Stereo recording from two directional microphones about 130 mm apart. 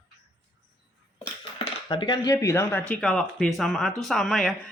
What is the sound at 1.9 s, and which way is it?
Speech, 35° left (ahead or behind).